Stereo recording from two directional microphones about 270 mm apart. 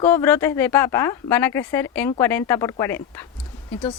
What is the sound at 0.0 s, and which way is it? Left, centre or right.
Speech, centre.